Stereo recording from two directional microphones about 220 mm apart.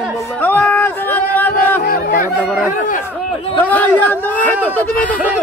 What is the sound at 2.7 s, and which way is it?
Speech, 35° left (ahead or behind).